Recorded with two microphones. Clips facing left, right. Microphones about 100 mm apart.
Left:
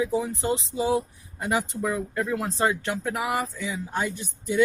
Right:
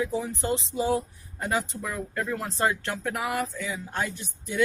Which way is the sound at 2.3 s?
15° left (ahead or behind).